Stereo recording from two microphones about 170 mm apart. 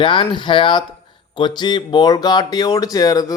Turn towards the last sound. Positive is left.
turn(degrees=20)  # may be behind; listen again after turning